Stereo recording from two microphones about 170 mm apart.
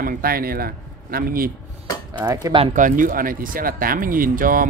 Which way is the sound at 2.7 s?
50° right (ahead or behind).